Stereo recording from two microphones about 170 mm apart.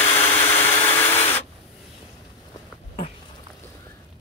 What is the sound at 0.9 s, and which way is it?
Printer, 10° left (ahead or behind).